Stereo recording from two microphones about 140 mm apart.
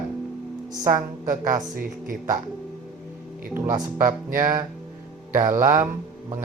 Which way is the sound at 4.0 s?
75° right (ahead or behind).